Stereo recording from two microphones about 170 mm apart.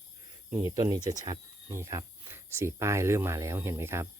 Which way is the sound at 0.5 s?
20° right (ahead or behind).